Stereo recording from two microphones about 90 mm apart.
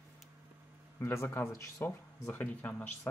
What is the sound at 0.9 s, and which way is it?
Speech, 25° left (ahead or behind).